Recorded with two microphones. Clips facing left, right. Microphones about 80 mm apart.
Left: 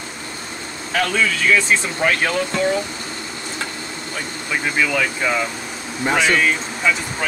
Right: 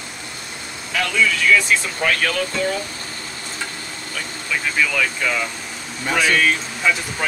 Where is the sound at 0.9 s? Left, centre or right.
Left.